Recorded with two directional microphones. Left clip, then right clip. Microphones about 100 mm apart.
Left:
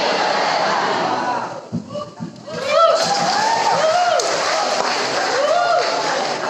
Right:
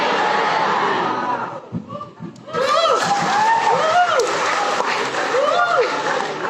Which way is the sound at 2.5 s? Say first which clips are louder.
Left 2 dB; 30° right (ahead or behind).